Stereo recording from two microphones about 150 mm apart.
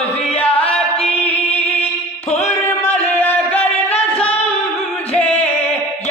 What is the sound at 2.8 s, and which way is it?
Music, 45° left (ahead or behind).